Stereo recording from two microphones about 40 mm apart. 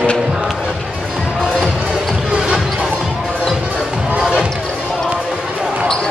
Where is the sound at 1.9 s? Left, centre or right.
Right.